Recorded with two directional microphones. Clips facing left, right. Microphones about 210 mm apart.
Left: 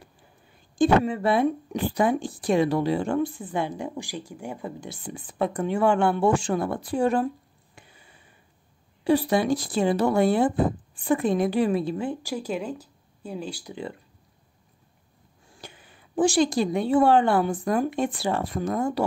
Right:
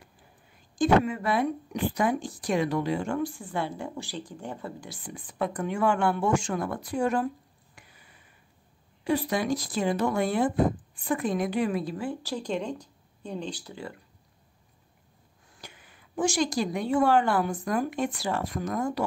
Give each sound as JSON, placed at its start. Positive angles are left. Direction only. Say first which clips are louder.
{"t": 0.7, "sound": "a woman's voice", "louder": "left 2 dB", "side_deg": 30}
{"t": 7.7, "sound": "a sound", "louder": "left 4 dB", "side_deg": 25}
{"t": 9.0, "sound": "a woman's voice", "louder": "left 5 dB", "side_deg": 30}
{"t": 15.5, "sound": "a woman's voice", "louder": "left 4 dB", "side_deg": 30}